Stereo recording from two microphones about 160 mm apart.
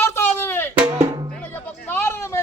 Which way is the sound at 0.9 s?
25° right (ahead or behind).